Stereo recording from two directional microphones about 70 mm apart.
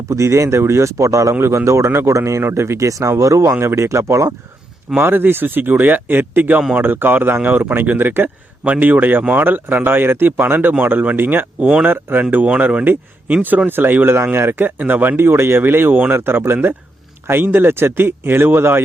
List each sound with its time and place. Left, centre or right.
0.0 s speech: right
3.5 s speech: right
4.9 s speech: right